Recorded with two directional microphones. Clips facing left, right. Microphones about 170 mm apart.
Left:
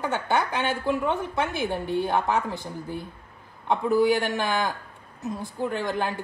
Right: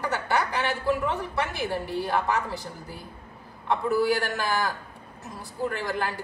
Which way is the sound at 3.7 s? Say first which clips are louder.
Left 3 dB; 20° left (ahead or behind).